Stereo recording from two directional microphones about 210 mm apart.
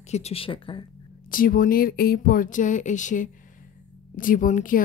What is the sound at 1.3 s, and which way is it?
Speech, 40° left (ahead or behind).